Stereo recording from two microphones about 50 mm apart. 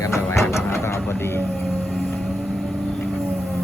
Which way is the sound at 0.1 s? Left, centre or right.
Left.